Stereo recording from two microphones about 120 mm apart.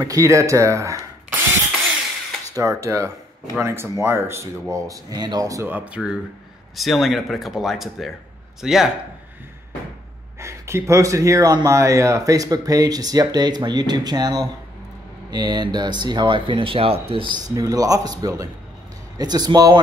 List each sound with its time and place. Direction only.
0.0 s speech: 30° right (ahead or behind)
2.5 s speech: 25° right (ahead or behind)
5.7 s speech: 15° right (ahead or behind)
6.7 s speech: centre (ahead or behind)
10.4 s speech: 25° right (ahead or behind); by 17.4 s 45° right (ahead or behind)
17.6 s speech: 30° right (ahead or behind)